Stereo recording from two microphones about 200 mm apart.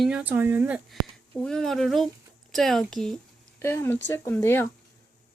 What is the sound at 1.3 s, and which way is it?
Speech, 5° left (ahead or behind).